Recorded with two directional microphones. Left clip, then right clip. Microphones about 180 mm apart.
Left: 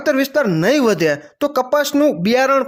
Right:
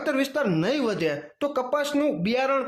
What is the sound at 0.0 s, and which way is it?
Speech, 30° left (ahead or behind).